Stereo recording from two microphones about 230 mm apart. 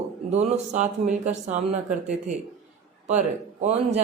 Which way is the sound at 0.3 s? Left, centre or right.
Right.